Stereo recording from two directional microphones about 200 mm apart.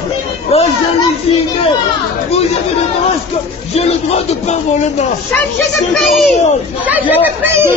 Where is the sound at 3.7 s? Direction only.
30° left (ahead or behind).